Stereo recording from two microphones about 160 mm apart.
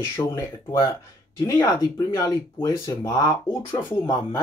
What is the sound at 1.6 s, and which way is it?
Speech, 20° left (ahead or behind).